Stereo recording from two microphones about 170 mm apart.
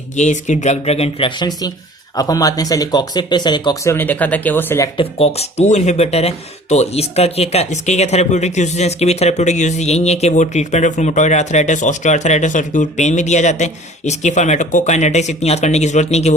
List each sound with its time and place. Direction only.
0.2 s speech: 45° left (ahead or behind)
1.4 s speech: 25° left (ahead or behind)
3.9 s speech: 10° left (ahead or behind)
4.9 s speech: 35° left (ahead or behind)